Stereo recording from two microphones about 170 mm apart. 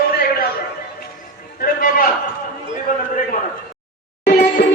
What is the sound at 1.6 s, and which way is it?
Speech, 55° left (ahead or behind).